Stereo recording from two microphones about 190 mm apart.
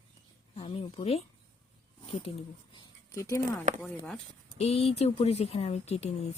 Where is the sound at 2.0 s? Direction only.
30° left (ahead or behind).